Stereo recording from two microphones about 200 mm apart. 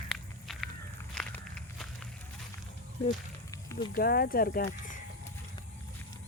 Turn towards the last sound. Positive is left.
turn(degrees=50)  # may be behind; listen again after turning